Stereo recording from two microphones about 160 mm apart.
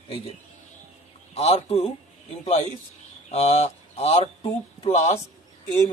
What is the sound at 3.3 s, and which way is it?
Speech, 40° left (ahead or behind).